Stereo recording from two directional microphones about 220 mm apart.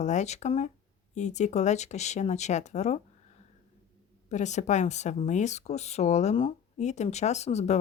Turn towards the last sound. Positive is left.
turn(degrees=30)  # may be behind; listen again after turning